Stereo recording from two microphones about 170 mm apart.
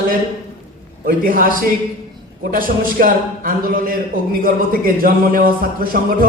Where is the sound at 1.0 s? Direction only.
55° right (ahead or behind).